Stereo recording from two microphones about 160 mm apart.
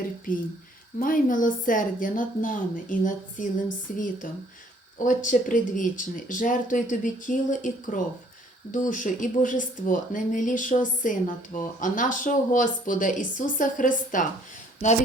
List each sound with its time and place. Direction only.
0.3 s speech: 55° left (ahead or behind)